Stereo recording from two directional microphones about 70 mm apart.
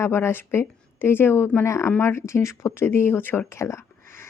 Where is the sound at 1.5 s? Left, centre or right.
Left.